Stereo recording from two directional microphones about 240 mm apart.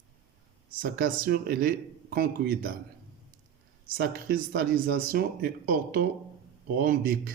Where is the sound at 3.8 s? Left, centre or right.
Right.